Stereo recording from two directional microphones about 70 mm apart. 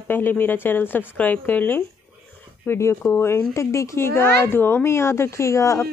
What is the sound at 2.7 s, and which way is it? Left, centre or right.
Speech, left.